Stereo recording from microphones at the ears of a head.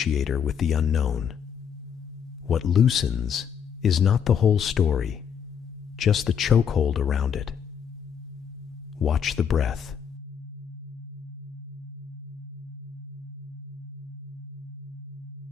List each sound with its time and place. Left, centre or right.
0.0 s speech: left
2.5 s speech: left
9.0 s speech: left